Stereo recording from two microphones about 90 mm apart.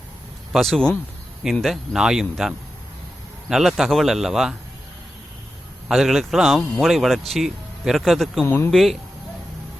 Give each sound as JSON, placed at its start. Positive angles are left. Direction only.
{"t": 0.5, "sound": "a man's voice", "side_deg": 0}
{"t": 5.9, "sound": "a man's voice", "side_deg": 0}
{"t": 8.4, "sound": "speech", "side_deg": 20}
{"t": 8.7, "sound": "a man's voice", "side_deg": 0}